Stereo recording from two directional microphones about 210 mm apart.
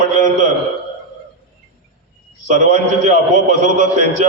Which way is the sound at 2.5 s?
35° right (ahead or behind).